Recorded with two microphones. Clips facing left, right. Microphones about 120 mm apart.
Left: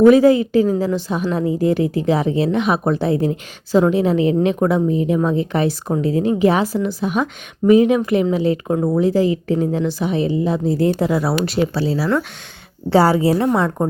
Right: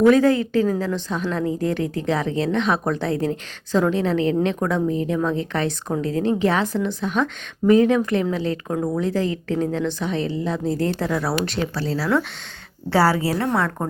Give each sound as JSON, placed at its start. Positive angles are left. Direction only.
{"t": 0.1, "sound": "a woman's voice", "side_deg": 10}
{"t": 12.9, "sound": "a woman's voice", "side_deg": 20}